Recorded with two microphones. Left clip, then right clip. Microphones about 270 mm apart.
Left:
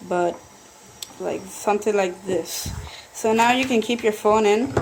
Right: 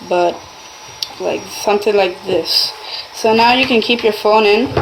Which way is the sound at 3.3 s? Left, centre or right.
Left.